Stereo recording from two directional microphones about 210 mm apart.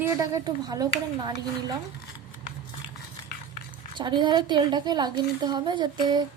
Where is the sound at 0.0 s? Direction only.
15° right (ahead or behind).